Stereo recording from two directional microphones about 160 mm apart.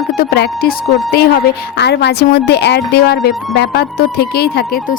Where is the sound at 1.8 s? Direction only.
90° left; by 4.8 s 75° left (ahead or behind).